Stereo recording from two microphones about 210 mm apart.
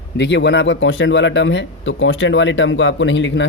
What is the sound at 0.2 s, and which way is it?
Speech, 55° left (ahead or behind).